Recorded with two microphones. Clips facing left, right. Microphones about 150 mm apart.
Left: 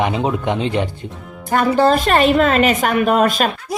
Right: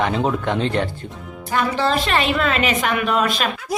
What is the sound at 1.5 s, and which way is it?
A woman's voice, 45° left (ahead or behind).